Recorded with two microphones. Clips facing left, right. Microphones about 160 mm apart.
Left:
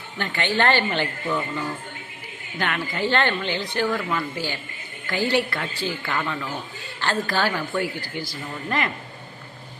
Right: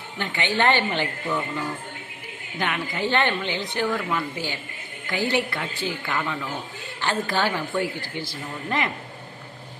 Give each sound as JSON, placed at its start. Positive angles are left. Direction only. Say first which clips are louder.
{"t": 0.2, "sound": "speech", "louder": "left 1 dB", "side_deg": -20}
{"t": 7.0, "sound": "a woman's voice", "louder": "left 1 dB", "side_deg": -20}